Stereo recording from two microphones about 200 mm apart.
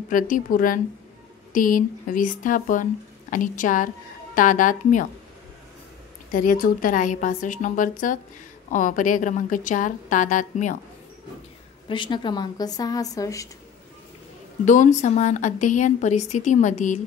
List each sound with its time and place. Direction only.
0.1 s speech: 45° left (ahead or behind)
6.3 s speech: 45° left (ahead or behind)
11.9 s speech: 25° left (ahead or behind)
14.6 s speech: 40° left (ahead or behind)